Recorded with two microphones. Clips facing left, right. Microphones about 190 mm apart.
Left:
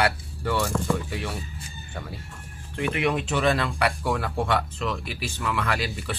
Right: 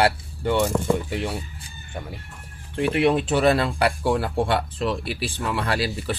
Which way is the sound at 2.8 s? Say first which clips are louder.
Right 5 dB; 30° right (ahead or behind).